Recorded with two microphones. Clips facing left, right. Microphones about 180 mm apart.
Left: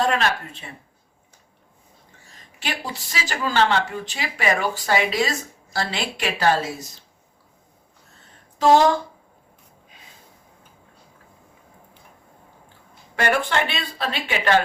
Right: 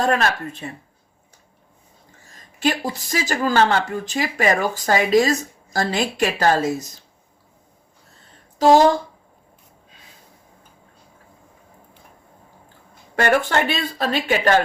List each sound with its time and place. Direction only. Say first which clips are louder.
0.0 s speech: right 2 dB; 45° right (ahead or behind)
2.6 s speech: right 8 dB; 45° right (ahead or behind)
8.5 s speech: right 2 dB; 40° right (ahead or behind)
13.1 s speech: right 3 dB; 45° right (ahead or behind)